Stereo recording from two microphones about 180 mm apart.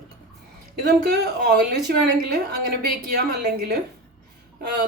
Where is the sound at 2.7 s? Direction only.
55° right (ahead or behind).